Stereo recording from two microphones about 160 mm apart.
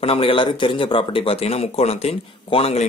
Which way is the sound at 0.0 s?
35° left (ahead or behind).